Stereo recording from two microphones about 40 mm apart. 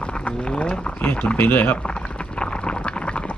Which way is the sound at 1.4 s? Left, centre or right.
Left.